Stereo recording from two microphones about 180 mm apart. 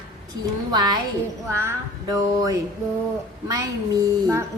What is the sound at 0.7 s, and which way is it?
Music, 20° right (ahead or behind).